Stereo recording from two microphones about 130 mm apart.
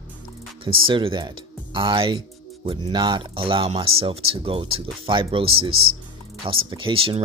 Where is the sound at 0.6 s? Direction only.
40° right (ahead or behind).